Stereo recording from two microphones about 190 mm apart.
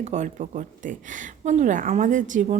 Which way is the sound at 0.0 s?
35° right (ahead or behind).